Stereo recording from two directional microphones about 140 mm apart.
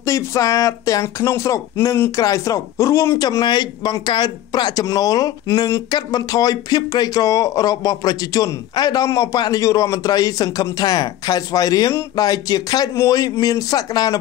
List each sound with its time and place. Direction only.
0.0 s speech: 20° left (ahead or behind)